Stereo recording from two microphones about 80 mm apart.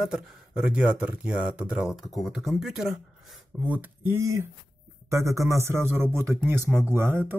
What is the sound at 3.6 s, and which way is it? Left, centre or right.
Speech, right.